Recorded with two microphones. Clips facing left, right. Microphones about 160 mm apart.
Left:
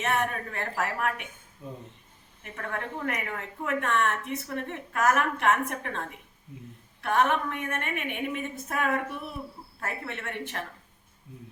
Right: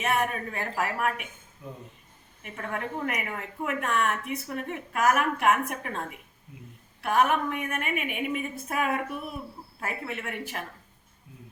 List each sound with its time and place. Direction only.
0.0 s a woman's voice: 5° right (ahead or behind)
2.4 s a woman's voice: 10° right (ahead or behind)